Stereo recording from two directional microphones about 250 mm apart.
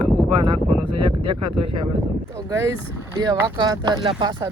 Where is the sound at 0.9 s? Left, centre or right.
Right.